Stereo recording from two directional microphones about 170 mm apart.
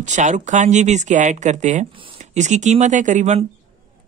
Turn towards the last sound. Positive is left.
turn(degrees=-45)  # may be behind; listen again after turning